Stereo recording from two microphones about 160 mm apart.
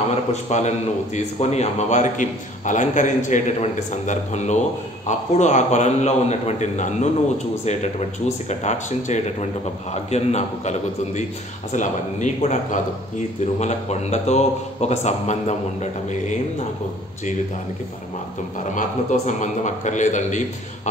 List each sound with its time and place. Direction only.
0.1 s a man's voice: 45° left (ahead or behind)
8.5 s a man's voice: 45° left (ahead or behind)
18.8 s a man's voice: 50° left (ahead or behind)